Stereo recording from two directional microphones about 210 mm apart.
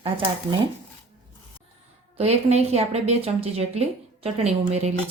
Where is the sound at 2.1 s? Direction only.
30° right (ahead or behind).